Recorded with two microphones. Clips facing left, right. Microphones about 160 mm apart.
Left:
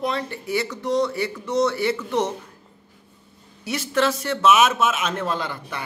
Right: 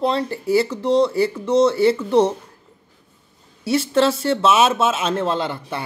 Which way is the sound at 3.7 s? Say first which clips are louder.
Right 5 dB; 30° right (ahead or behind).